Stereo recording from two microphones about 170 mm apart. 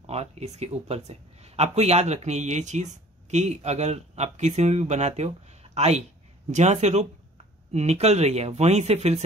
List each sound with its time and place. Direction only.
0.0 s speech: 40° right (ahead or behind)